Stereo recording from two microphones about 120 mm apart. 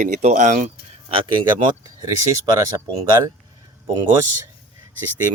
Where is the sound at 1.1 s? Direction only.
45° right (ahead or behind).